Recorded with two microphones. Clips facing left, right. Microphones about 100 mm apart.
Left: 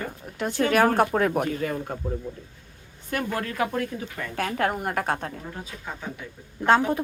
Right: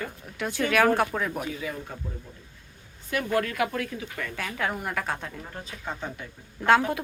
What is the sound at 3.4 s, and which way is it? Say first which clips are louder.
Speech: left 1 dB; 30° left (ahead or behind).